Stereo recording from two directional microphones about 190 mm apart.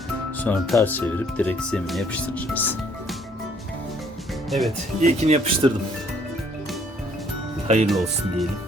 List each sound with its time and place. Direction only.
0.3 s speech: 10° left (ahead or behind)
4.4 s speech: centre (ahead or behind)
4.9 s speech: 35° right (ahead or behind)
7.9 s speech: centre (ahead or behind)